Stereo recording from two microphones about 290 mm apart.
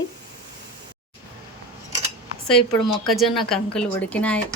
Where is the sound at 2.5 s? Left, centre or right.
Centre.